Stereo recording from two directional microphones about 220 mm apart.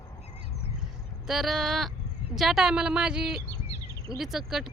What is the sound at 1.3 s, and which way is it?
A woman's voice, centre (ahead or behind).